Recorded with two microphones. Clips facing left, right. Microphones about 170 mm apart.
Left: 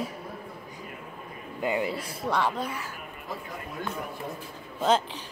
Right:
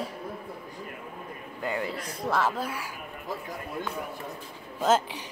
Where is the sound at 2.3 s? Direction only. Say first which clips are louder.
Even; 5° right (ahead or behind).